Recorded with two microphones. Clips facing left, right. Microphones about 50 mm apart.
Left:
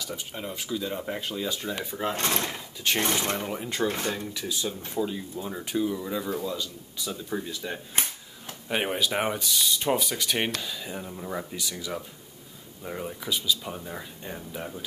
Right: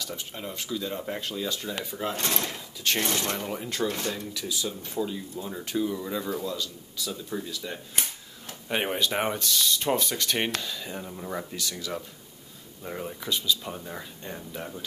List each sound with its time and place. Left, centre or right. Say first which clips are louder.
0.0 s speech: left 1 dB; centre
2.1 s speech: left 2 dB; left
2.8 s speech: left 1 dB; centre
3.8 s speech: left 2 dB; left; by 6.5 s centre
6.5 s speech: even; centre
8.6 s speech: even; centre